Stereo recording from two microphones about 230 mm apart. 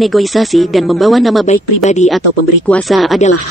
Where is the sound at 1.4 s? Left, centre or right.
Left.